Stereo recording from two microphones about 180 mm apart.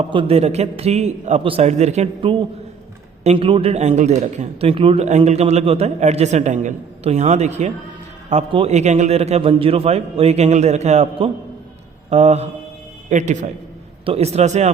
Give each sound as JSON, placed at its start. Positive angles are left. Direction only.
{"t": 0.0, "sound": "a man's voice", "side_deg": -30}